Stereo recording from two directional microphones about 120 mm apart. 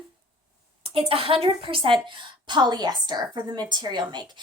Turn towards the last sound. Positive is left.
turn(degrees=-35)  # may be behind; listen again after turning